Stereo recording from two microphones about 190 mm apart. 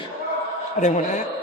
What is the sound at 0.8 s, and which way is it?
Speech, 40° left (ahead or behind).